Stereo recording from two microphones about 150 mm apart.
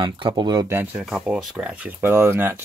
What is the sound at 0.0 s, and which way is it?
Speech, 30° right (ahead or behind).